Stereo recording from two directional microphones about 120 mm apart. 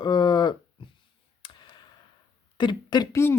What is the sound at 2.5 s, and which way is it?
Speech, 40° left (ahead or behind).